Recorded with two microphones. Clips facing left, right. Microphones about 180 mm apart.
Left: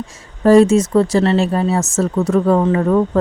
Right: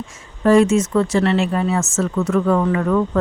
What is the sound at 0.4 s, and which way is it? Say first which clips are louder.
A woman's voice: left 4 dB; 35° left (ahead or behind).